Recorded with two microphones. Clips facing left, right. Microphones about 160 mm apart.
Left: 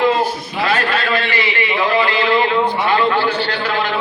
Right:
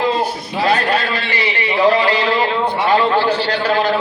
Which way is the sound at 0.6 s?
35° right (ahead or behind).